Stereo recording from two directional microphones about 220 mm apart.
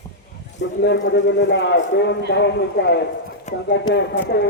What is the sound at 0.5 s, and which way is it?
A man's voice, 55° left (ahead or behind).